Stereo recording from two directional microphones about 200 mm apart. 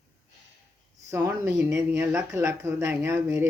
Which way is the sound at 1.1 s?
10° right (ahead or behind).